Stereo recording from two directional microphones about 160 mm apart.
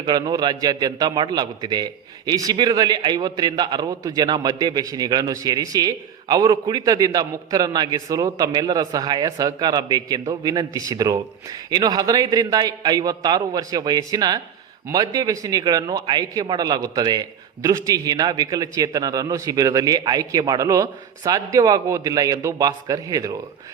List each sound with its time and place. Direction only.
0.0 s a man's voice: 25° right (ahead or behind)